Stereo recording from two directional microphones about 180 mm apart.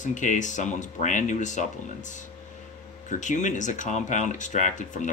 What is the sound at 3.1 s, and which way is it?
Speech, 40° left (ahead or behind).